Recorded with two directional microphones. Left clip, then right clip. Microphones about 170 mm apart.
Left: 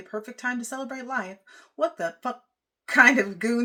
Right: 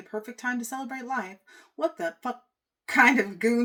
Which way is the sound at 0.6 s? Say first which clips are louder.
Even; 20° left (ahead or behind).